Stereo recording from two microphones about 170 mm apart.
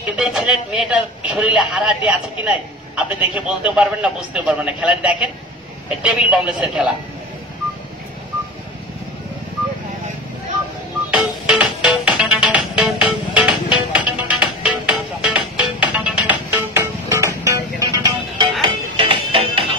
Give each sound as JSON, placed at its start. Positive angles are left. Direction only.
{"t": 0.1, "sound": "a man's voice", "side_deg": -5}
{"t": 6.3, "sound": "a man's voice", "side_deg": -5}
{"t": 11.1, "sound": "music", "side_deg": -5}